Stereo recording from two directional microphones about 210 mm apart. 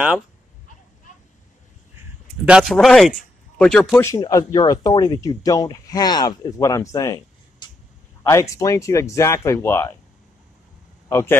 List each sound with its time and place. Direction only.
1.1 s vehicle: 35° left (ahead or behind)
2.4 s speech: centre (ahead or behind)
11.1 s speech: 15° left (ahead or behind)